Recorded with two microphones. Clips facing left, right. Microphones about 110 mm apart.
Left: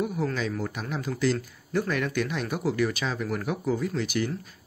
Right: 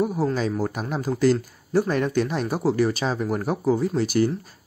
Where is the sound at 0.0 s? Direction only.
35° right (ahead or behind).